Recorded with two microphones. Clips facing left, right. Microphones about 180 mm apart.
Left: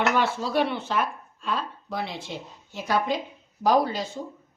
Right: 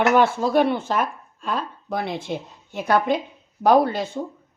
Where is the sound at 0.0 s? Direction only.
50° right (ahead or behind).